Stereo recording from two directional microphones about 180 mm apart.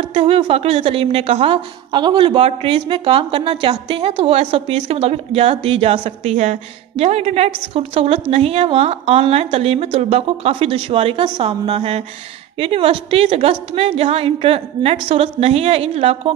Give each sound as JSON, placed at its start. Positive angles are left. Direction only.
{"t": 0.1, "sound": "a woman's voice", "side_deg": -30}